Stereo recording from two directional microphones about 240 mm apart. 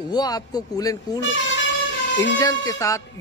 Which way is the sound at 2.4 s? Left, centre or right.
Centre.